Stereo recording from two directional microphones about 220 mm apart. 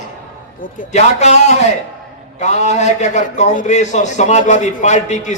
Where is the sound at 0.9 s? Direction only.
30° left (ahead or behind).